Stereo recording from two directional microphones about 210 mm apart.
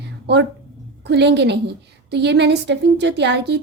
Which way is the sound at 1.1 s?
55° right (ahead or behind).